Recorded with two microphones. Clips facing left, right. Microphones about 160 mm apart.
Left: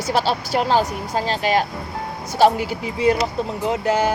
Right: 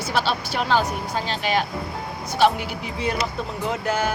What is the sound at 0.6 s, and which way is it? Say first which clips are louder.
Speech: left 3 dB; 35° left (ahead or behind).